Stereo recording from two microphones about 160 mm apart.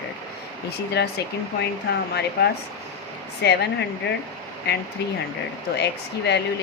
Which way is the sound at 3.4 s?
90° left.